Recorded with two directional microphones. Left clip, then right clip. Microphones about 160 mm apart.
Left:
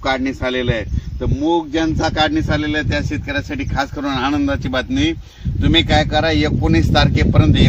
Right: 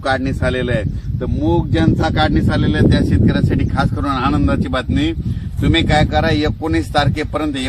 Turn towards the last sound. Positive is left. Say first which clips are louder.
# left 3 dB
turn(degrees=5)  # may be behind; listen again after turning